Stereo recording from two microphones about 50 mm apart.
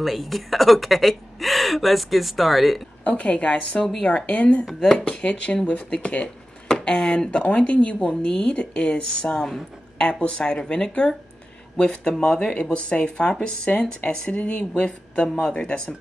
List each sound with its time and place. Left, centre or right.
0.0 s speech: centre
3.0 s speech: left